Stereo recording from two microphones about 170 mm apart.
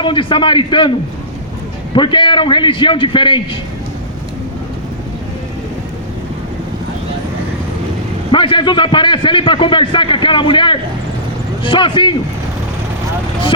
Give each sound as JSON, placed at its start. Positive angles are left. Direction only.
{"t": 0.0, "sound": "a man's voice", "side_deg": 30}
{"t": 8.3, "sound": "a man's voice", "side_deg": 30}